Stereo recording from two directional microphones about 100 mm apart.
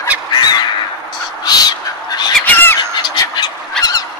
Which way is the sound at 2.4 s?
20° left (ahead or behind).